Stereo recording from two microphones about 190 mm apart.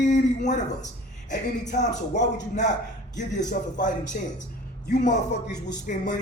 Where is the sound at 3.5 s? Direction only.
40° left (ahead or behind).